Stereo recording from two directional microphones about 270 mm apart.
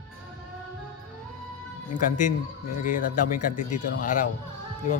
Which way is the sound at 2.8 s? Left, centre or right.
Left.